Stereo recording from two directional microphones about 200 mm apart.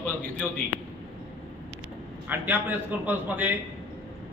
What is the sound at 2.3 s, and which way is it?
A man's voice, 10° right (ahead or behind).